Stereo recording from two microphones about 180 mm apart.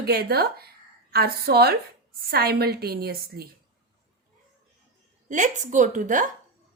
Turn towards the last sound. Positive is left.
turn(degrees=-45)  # may be behind; listen again after turning